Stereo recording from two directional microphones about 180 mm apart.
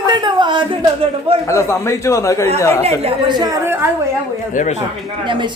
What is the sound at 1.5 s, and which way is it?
A man's voice, 15° left (ahead or behind).